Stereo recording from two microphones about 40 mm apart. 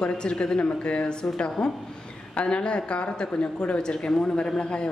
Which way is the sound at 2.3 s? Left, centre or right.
Left.